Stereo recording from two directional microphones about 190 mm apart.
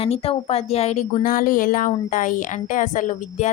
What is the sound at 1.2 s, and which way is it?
A woman's voice, 45° left (ahead or behind).